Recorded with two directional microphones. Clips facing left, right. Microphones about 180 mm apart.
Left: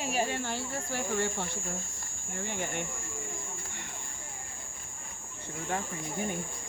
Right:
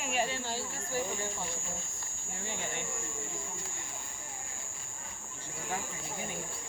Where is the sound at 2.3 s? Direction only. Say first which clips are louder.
Left 5 dB; 55° left (ahead or behind).